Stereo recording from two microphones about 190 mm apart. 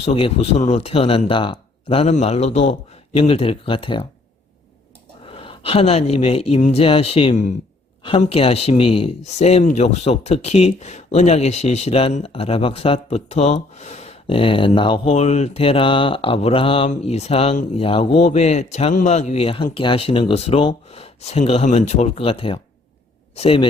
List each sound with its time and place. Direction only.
0.0 s speech: 30° left (ahead or behind)
5.2 s speech: 30° left (ahead or behind)